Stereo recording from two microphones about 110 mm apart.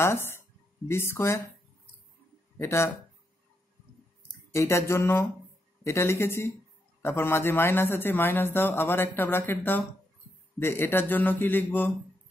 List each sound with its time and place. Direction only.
0.0 s a man's voice: 20° left (ahead or behind)
2.6 s a man's voice: 25° left (ahead or behind)
4.6 s a man's voice: 25° left (ahead or behind)